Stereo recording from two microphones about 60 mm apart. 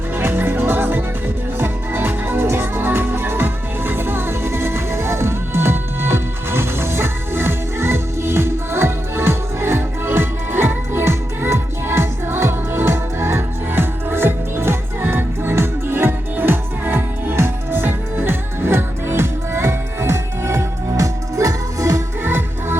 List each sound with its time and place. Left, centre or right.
0.2 s music: right
20.9 s music: right
22.2 s music: right